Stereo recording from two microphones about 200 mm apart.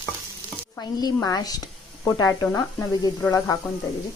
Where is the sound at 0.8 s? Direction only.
20° left (ahead or behind).